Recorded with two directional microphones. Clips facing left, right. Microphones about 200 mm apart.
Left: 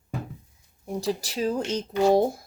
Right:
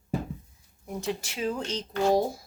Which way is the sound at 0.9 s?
35° left (ahead or behind).